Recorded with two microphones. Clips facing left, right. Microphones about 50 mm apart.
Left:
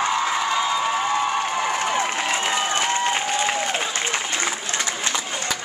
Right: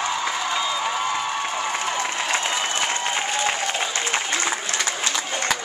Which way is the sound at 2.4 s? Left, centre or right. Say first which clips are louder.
Left 2 dB; centre.